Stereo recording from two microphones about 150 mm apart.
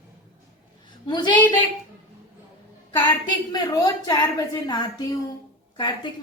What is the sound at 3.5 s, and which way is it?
A woman's voice, 25° left (ahead or behind).